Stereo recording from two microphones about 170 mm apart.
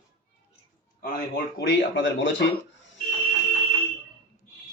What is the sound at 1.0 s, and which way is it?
Speech, 70° left (ahead or behind).